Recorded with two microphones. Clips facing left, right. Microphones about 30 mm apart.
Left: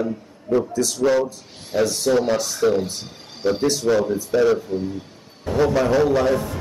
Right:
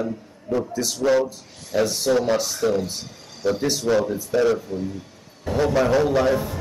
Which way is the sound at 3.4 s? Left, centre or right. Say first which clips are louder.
Left 2 dB; left.